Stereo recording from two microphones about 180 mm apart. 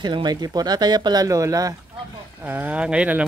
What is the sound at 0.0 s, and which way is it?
Speech, 25° right (ahead or behind).